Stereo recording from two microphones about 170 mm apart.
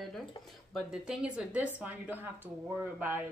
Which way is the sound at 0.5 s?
Centre (ahead or behind).